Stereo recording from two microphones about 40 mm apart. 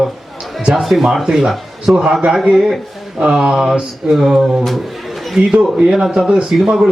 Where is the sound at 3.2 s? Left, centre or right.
Centre.